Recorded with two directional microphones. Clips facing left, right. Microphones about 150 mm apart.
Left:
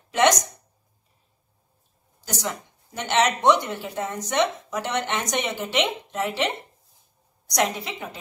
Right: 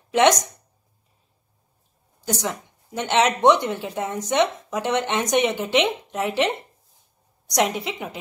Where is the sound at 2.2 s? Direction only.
20° right (ahead or behind).